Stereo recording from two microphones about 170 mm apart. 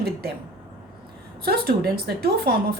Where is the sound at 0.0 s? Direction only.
65° right (ahead or behind).